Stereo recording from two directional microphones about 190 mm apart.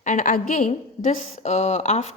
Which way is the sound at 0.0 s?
40° left (ahead or behind).